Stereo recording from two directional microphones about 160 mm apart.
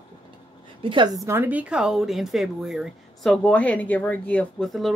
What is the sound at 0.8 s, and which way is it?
Speech, 30° right (ahead or behind).